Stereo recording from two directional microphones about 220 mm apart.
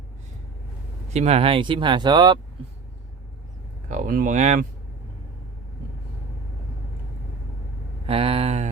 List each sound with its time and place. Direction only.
1.1 s speech: 30° right (ahead or behind)
3.8 s speech: 35° right (ahead or behind)
8.0 s a sound: 25° right (ahead or behind)